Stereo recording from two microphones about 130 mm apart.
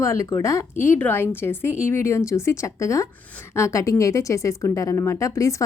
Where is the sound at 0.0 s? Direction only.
25° left (ahead or behind).